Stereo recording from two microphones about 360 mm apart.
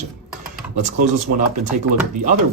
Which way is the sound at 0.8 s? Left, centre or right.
Right.